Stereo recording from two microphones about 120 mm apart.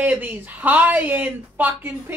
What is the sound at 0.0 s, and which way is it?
A woman's voice, 15° right (ahead or behind).